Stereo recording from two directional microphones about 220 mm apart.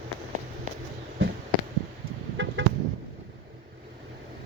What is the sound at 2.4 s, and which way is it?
Chicken, 55° right (ahead or behind).